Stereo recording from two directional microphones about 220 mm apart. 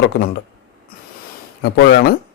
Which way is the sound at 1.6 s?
50° left (ahead or behind).